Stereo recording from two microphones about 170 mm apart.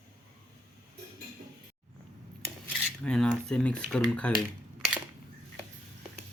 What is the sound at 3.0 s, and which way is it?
Speech, 5° left (ahead or behind).